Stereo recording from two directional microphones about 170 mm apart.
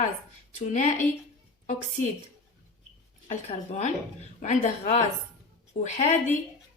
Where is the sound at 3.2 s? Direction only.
40° left (ahead or behind).